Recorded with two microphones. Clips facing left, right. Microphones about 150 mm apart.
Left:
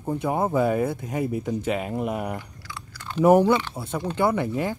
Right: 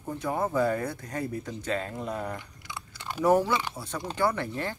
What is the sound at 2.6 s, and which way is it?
Chewing, 20° right (ahead or behind).